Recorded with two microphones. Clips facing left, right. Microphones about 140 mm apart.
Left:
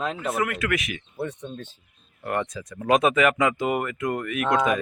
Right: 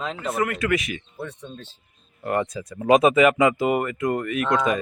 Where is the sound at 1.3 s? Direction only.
20° left (ahead or behind).